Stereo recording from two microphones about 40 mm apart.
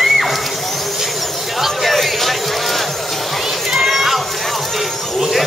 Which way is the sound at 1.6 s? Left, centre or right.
Centre.